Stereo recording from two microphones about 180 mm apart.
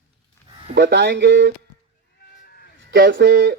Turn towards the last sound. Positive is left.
turn(degrees=-70)  # may be behind; listen again after turning